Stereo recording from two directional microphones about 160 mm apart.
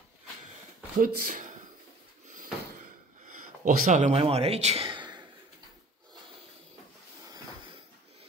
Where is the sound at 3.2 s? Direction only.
55° right (ahead or behind); by 5.3 s 30° right (ahead or behind).